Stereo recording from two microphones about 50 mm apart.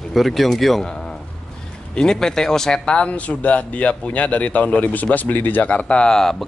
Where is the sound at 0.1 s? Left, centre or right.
Centre.